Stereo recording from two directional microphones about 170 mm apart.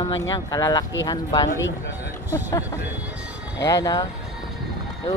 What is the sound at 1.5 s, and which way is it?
Speech, 90° left.